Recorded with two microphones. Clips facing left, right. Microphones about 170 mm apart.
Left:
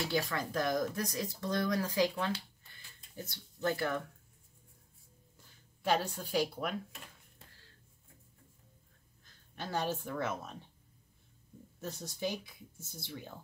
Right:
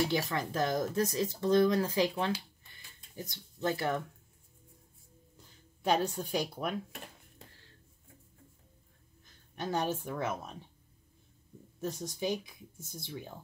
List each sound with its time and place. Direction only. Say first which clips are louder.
0.0 s speech: right 3 dB; 20° right (ahead or behind)
5.8 s speech: right 3 dB; 20° right (ahead or behind)
9.6 s speech: right 3 dB; 20° right (ahead or behind)
11.8 s speech: right 3 dB; 15° right (ahead or behind)